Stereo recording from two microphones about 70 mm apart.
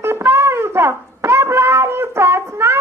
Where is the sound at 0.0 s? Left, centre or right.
Right.